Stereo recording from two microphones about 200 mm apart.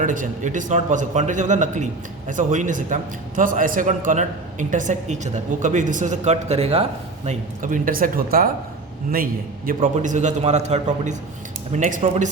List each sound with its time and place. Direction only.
0.0 s a man's voice: 40° right (ahead or behind)
7.3 s a man's voice: 40° right (ahead or behind)